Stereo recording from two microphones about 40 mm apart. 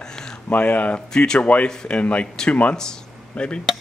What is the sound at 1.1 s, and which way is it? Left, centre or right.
Speech, left.